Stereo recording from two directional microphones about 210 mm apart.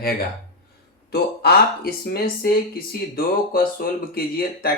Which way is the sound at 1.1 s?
50° left (ahead or behind).